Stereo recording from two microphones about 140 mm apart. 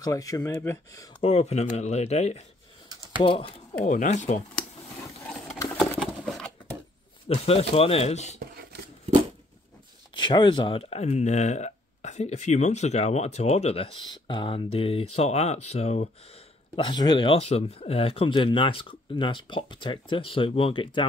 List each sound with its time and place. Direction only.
0.0 s speech: 25° left (ahead or behind)
1.2 s speech: 50° left (ahead or behind)
3.2 s speech: 40° left (ahead or behind)
3.8 s speech: 60° left (ahead or behind)
5.8 s a sound: centre (ahead or behind)
7.2 s speech: 45° left (ahead or behind)
10.1 s speech: 35° left (ahead or behind); by 13.8 s 50° left (ahead or behind)
14.0 s speech: 35° left (ahead or behind); by 16.1 s 50° left (ahead or behind)
16.7 s speech: 30° left (ahead or behind)